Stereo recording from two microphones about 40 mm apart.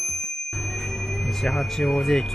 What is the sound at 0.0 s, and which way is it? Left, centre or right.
Speech, centre.